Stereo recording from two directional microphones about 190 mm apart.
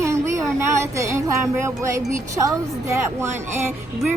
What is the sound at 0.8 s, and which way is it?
Music, 15° right (ahead or behind).